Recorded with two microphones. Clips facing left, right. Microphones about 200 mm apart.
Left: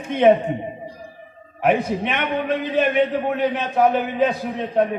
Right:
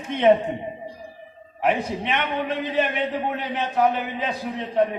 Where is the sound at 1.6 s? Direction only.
50° left (ahead or behind).